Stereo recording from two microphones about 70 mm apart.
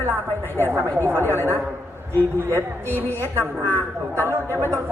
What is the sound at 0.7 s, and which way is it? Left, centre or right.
Speech, right.